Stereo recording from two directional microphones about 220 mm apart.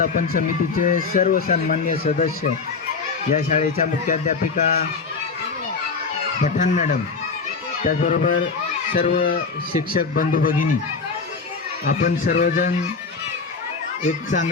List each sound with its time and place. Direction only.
0.0 s speech: 40° left (ahead or behind)
3.3 s speech: 35° left (ahead or behind)
6.4 s speech: 35° left (ahead or behind)
11.9 s speech: 40° left (ahead or behind)
14.3 s speech: 35° left (ahead or behind)